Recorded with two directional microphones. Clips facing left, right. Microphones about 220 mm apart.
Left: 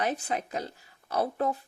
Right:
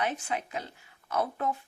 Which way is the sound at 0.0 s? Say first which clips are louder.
Left 2 dB; 40° left (ahead or behind).